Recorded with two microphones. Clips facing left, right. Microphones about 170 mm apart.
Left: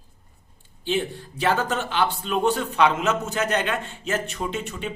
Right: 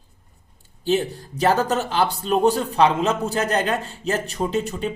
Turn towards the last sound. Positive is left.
turn(degrees=-35)  # may be behind; listen again after turning